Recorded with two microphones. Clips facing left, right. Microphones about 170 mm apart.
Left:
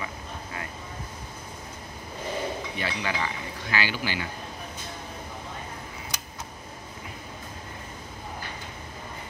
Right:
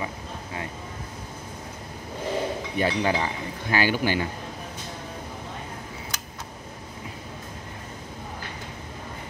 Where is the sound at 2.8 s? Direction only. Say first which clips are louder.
Right 9 dB; 40° right (ahead or behind).